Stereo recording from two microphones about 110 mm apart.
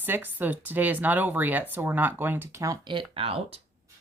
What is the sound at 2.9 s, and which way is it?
Speech, 55° right (ahead or behind).